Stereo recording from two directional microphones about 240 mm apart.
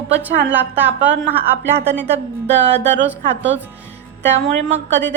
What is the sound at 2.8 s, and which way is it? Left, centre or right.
Speech, right.